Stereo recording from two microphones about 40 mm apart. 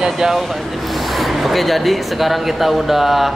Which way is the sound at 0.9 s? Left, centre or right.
Centre.